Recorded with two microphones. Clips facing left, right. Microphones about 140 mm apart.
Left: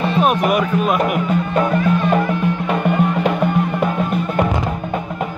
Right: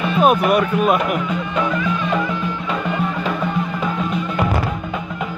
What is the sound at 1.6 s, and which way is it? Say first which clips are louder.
Music: left 4 dB; 45° left (ahead or behind).